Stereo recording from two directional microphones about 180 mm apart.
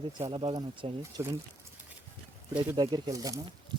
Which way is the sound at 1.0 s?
15° right (ahead or behind).